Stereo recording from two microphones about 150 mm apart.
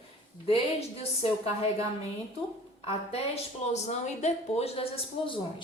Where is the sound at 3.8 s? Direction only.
50° left (ahead or behind).